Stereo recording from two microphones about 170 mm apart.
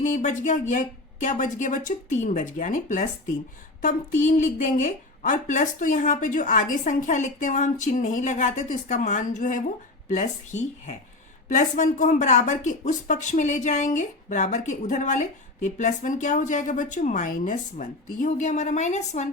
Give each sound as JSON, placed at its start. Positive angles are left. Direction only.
{"t": 0.0, "sound": "speech", "side_deg": 50}